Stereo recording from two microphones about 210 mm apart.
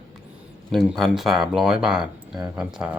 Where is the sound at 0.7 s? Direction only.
Centre (ahead or behind).